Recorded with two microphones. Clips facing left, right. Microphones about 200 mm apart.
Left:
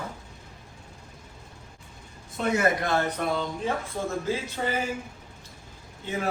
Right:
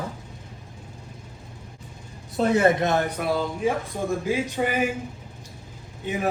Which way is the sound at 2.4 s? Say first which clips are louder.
Right 5 dB; 30° right (ahead or behind).